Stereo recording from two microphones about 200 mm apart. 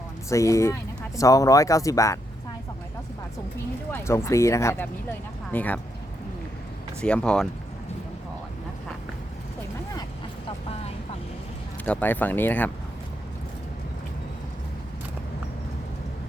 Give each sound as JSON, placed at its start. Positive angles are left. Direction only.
{"t": 0.3, "sound": "speech", "side_deg": 15}
{"t": 3.9, "sound": "speech", "side_deg": 15}
{"t": 7.0, "sound": "speech", "side_deg": 5}
{"t": 11.9, "sound": "speech", "side_deg": 10}